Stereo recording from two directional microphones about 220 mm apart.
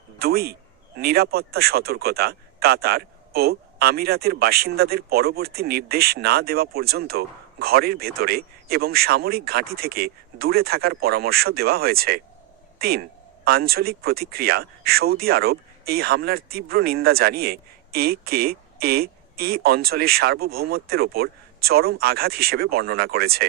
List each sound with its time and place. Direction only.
0.2 s speech: 45° right (ahead or behind)